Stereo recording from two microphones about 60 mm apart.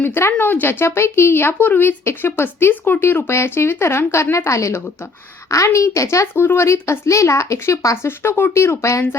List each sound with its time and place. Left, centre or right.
0.0 s speech: left
6.3 s speech: left